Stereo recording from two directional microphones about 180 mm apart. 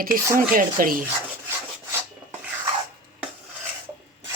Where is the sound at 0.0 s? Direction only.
50° right (ahead or behind).